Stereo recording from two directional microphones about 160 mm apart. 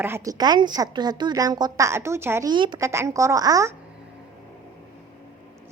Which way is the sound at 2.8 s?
20° right (ahead or behind).